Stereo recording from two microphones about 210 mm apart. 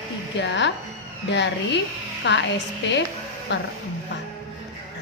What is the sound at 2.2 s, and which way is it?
Speech, 60° left (ahead or behind).